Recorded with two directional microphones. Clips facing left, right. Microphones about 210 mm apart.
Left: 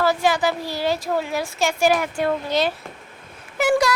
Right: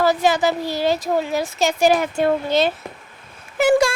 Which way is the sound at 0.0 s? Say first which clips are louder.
Right 2 dB; 20° right (ahead or behind).